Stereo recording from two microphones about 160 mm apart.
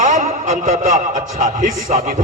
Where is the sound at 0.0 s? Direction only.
55° right (ahead or behind).